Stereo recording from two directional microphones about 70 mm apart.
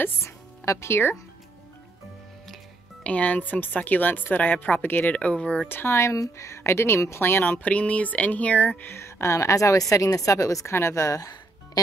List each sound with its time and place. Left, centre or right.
0.0 s music: left
3.0 s speech: centre
5.0 s speech: centre
5.7 s speech: left
7.7 s speech: centre
8.8 s a woman's voice: left